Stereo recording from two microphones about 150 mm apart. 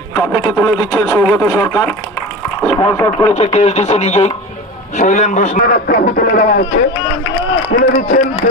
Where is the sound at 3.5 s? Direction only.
50° left (ahead or behind).